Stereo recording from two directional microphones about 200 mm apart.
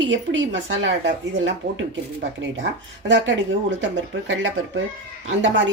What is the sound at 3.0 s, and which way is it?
Speech, 65° right (ahead or behind).